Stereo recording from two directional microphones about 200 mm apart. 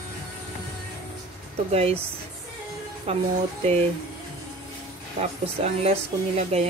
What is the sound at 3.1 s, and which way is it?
Speech, 30° right (ahead or behind).